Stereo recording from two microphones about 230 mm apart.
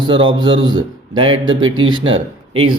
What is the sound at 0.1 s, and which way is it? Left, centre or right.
Speech, right.